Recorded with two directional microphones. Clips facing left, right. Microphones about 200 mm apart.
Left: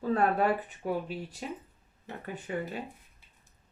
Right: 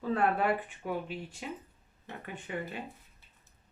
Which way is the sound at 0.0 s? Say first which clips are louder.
Left 2 dB; 40° left (ahead or behind).